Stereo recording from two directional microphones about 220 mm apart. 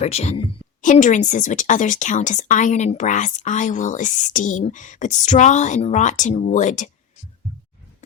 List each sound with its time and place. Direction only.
0.0 s speech: 30° left (ahead or behind)